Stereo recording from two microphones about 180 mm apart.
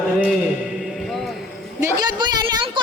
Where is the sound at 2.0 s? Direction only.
25° right (ahead or behind).